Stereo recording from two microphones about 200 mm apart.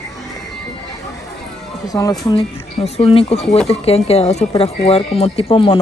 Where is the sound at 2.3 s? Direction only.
30° left (ahead or behind).